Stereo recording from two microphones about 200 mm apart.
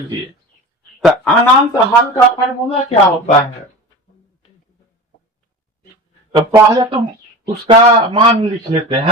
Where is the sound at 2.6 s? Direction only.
30° left (ahead or behind).